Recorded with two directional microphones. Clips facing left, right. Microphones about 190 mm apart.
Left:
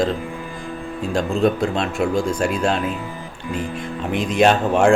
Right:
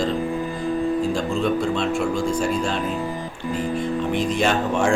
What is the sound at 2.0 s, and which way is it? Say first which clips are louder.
Speech: left 2 dB; 70° left (ahead or behind).